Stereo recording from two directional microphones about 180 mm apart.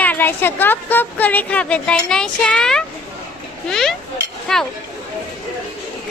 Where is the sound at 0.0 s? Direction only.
10° left (ahead or behind).